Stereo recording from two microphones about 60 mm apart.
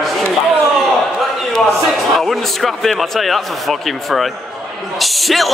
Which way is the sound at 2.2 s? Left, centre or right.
Centre.